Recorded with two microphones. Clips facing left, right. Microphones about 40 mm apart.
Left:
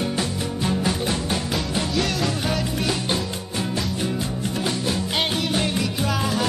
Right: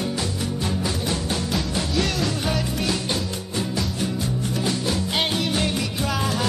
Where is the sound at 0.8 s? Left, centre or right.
Left.